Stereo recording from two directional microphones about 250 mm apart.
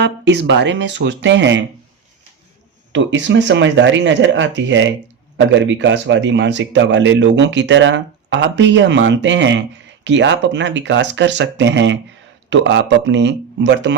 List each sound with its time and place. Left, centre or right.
0.0 s speech: right
2.9 s speech: right